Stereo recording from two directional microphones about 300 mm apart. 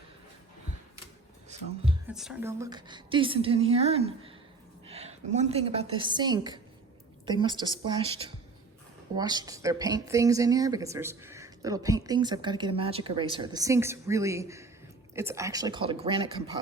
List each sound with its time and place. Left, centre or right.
1.5 s music: right
2.0 s a woman's voice: centre